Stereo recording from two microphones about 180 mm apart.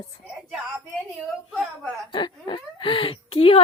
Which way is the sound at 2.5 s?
25° left (ahead or behind).